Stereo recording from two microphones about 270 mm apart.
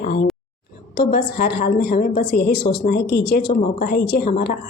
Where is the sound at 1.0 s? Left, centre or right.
Left.